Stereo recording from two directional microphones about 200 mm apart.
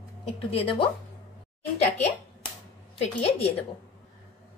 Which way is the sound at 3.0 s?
30° left (ahead or behind).